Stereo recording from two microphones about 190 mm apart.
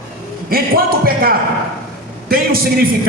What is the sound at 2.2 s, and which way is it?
Speech, 50° right (ahead or behind).